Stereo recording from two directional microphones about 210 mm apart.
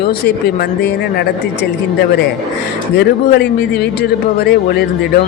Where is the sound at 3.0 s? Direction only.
50° left (ahead or behind).